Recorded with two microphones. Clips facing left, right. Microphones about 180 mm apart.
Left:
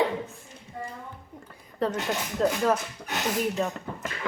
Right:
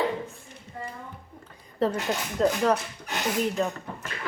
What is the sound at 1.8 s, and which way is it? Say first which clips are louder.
Speech: right 2 dB; centre (ahead or behind).